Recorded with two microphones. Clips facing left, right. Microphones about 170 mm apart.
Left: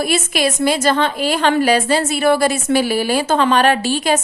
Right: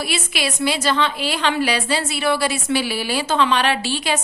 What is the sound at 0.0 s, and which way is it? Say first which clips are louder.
A woman's voice: left 7 dB; 45° left (ahead or behind).